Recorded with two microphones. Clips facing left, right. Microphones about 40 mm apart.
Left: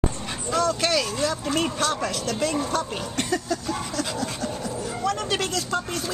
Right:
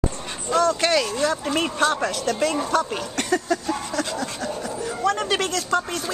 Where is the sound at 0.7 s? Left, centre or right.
Centre.